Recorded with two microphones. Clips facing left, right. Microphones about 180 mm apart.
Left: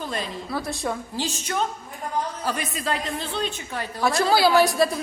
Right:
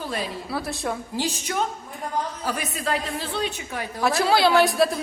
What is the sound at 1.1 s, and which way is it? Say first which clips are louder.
A woman's voice: right 1 dB; 15° right (ahead or behind).